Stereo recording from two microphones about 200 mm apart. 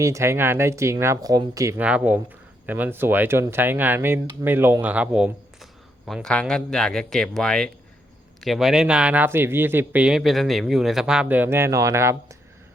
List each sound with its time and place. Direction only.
0.0 s speech: 15° right (ahead or behind)